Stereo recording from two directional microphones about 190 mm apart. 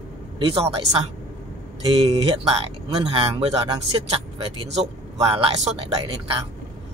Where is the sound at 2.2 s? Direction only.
25° right (ahead or behind).